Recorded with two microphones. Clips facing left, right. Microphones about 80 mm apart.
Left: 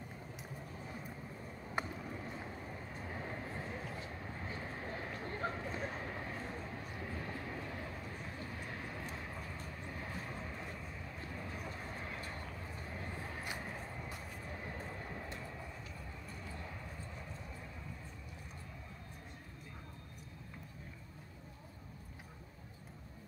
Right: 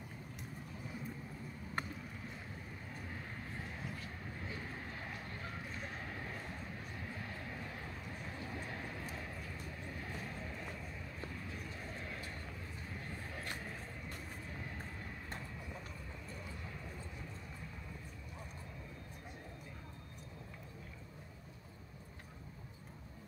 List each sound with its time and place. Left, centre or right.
1.8 s vehicle: centre
3.9 s vehicle: left
5.4 s a sound: left
5.9 s boat: centre
8.6 s vehicle: centre
11.8 s vehicle: centre